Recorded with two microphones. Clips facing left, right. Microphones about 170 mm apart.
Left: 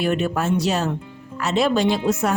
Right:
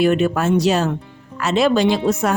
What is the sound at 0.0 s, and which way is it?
A woman's voice, 90° right.